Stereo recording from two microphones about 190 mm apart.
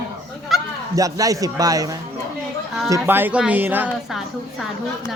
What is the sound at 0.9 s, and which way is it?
Speech, 20° right (ahead or behind).